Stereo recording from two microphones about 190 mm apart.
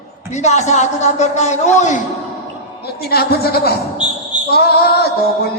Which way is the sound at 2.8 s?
55° left (ahead or behind).